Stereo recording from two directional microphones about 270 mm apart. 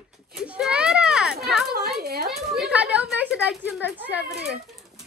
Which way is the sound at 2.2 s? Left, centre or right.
Centre.